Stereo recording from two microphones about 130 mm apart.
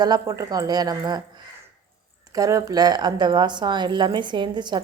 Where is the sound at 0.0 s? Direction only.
30° right (ahead or behind).